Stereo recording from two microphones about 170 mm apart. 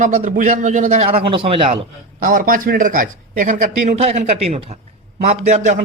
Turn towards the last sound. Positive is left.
turn(degrees=-40)  # may be behind; listen again after turning